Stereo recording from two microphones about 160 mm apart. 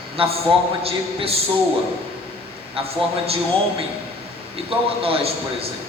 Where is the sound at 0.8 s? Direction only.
40° right (ahead or behind).